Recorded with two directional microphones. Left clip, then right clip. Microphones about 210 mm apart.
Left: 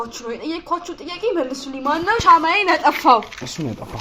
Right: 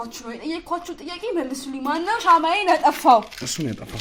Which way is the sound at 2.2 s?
40° right (ahead or behind).